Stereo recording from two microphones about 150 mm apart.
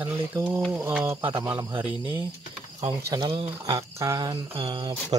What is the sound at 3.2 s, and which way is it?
Speech, 35° right (ahead or behind).